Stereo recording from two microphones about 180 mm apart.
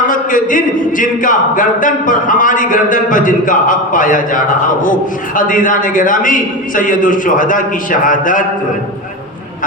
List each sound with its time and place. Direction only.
0.1 s speech: 50° left (ahead or behind)